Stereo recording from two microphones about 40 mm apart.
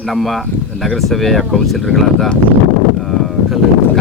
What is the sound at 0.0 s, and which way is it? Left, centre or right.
Speech, centre.